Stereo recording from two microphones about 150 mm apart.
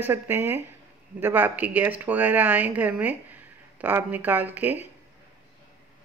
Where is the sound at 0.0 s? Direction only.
15° right (ahead or behind).